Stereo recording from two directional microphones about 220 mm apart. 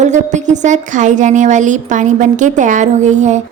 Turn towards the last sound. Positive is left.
turn(degrees=-35)  # may be behind; listen again after turning